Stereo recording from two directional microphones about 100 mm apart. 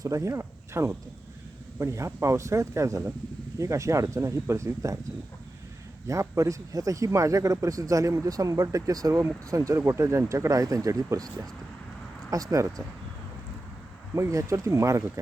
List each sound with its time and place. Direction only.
0.0 s speech: 35° right (ahead or behind)
6.1 s speech: 30° right (ahead or behind)
14.2 s speech: 30° right (ahead or behind)